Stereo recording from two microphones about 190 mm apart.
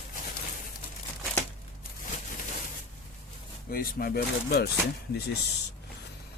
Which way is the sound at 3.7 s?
50° left (ahead or behind).